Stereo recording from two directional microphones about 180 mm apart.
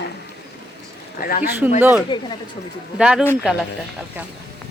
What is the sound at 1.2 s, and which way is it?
Speech, 55° left (ahead or behind).